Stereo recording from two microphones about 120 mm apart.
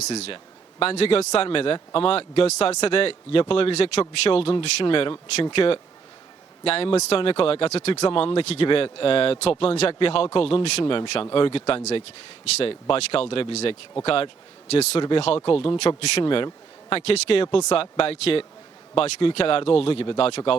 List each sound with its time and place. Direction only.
0.0 s speech: 65° left (ahead or behind)
15.4 s speech: 50° left (ahead or behind)